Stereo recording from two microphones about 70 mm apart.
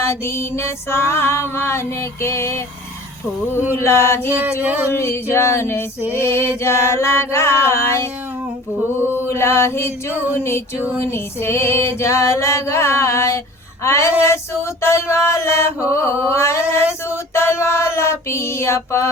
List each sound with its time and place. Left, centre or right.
0.0 s music: left
3.7 s music: left
9.3 s music: left
10.1 s a sound: right
10.3 s music: left
17.1 s a sound: left